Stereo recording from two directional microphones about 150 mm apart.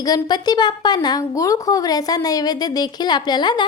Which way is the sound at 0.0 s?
25° left (ahead or behind).